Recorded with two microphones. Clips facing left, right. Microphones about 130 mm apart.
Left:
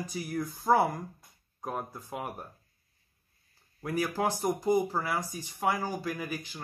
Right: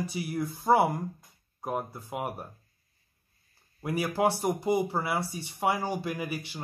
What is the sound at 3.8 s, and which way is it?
Speech, 10° right (ahead or behind).